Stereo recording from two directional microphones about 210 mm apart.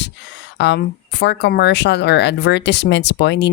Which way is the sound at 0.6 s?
55° left (ahead or behind).